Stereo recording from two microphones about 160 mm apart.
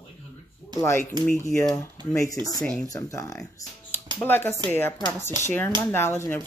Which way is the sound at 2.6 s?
10° left (ahead or behind).